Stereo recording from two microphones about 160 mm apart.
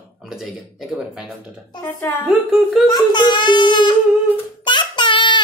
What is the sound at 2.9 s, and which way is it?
A child's voice, 30° left (ahead or behind).